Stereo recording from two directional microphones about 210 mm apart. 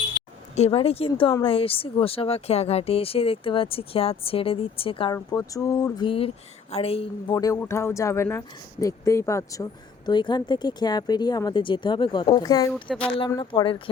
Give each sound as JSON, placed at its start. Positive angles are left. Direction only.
{"t": 0.5, "sound": "speech", "side_deg": 30}
{"t": 5.1, "sound": "speech", "side_deg": 15}
{"t": 7.3, "sound": "speech", "side_deg": 15}
{"t": 12.9, "sound": "speech", "side_deg": 5}
{"t": 13.1, "sound": "speech", "side_deg": 20}